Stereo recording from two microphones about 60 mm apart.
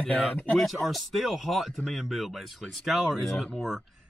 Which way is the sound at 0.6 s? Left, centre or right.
Centre.